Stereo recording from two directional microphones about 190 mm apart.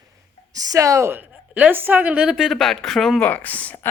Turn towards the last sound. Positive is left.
turn(degrees=10)  # may be behind; listen again after turning